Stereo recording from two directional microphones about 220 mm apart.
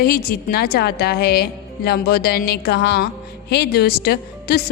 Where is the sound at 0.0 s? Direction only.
45° left (ahead or behind).